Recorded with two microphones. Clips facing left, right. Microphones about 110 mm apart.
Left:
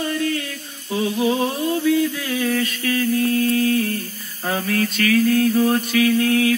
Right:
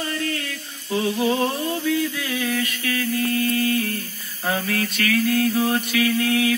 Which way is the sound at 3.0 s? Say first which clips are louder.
Left 4 dB; 45° left (ahead or behind).